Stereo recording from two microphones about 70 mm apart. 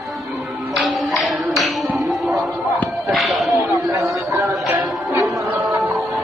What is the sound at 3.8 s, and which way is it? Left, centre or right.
Chatter, right.